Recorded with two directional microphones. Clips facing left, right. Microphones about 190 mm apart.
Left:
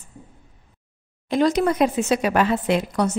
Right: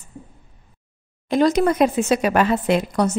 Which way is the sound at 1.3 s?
45° right (ahead or behind).